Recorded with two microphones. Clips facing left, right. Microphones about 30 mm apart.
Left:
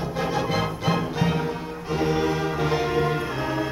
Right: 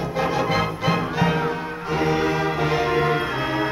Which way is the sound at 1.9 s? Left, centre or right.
Right.